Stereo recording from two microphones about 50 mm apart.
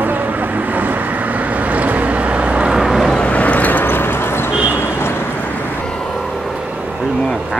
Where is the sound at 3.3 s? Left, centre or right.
Left.